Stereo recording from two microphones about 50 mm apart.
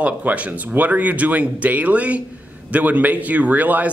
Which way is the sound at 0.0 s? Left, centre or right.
Right.